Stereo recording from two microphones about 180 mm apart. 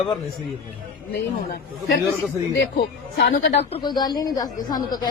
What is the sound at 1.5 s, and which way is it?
Speech, 65° left (ahead or behind).